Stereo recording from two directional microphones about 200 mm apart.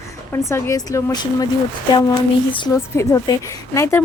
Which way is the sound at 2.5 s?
25° left (ahead or behind).